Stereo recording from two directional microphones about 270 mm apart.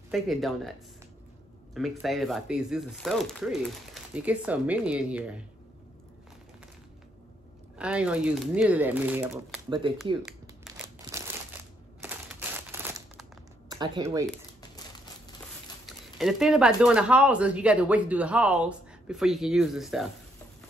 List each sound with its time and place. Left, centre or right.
0.1 s speech: centre
7.7 s speech: centre
9.7 s speech: centre
10.6 s crumpling: centre
16.2 s speech: centre